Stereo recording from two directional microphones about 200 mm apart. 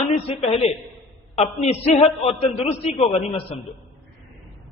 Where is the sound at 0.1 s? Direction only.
30° left (ahead or behind).